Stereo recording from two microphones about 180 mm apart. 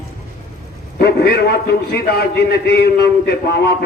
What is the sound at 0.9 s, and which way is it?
A man's voice, 65° left (ahead or behind).